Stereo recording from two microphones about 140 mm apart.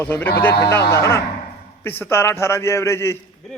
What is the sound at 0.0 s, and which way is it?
A man's voice, 15° left (ahead or behind).